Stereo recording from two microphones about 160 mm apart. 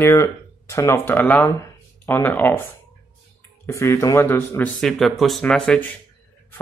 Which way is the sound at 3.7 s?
20° left (ahead or behind).